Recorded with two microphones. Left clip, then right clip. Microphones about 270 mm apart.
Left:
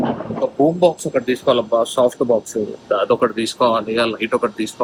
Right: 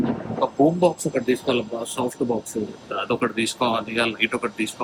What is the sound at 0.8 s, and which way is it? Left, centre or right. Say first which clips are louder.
Speech: left 5 dB; centre.